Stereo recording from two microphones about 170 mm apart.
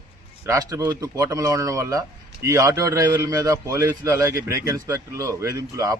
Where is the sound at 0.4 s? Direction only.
20° right (ahead or behind).